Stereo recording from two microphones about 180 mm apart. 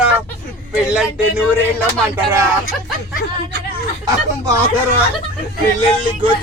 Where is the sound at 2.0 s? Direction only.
15° right (ahead or behind).